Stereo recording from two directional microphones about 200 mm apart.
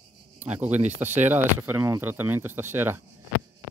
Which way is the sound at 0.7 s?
10° right (ahead or behind).